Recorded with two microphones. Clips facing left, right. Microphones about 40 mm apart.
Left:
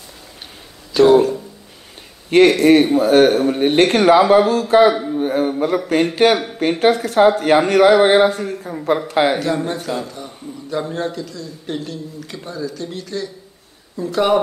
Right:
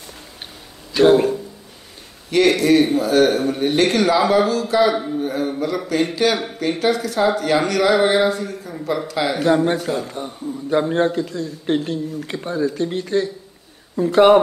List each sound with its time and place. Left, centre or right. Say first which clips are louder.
0.9 s a sound: left 2 dB; right
2.3 s speech: left 4 dB; left
10.0 s a man's voice: right 4 dB; right